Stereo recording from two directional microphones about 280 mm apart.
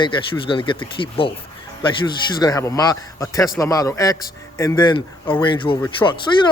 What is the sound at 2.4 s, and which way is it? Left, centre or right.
Speech, centre.